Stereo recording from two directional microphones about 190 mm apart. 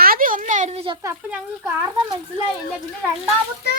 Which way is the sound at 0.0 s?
50° right (ahead or behind).